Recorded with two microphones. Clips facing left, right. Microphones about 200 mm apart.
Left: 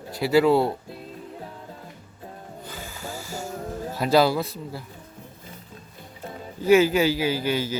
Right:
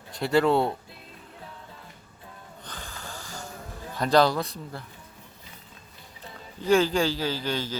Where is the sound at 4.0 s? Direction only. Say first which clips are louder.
Left 1 dB; 5° left (ahead or behind).